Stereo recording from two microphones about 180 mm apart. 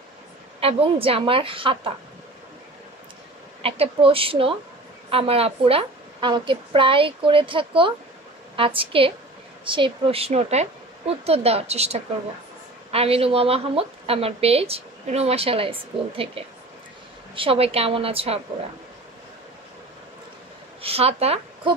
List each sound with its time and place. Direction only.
0.6 s a woman's voice: 30° right (ahead or behind)
3.6 s a woman's voice: 30° right (ahead or behind)
20.8 s a woman's voice: 35° right (ahead or behind)